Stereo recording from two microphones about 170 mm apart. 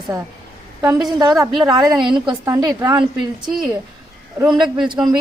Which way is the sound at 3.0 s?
Centre (ahead or behind).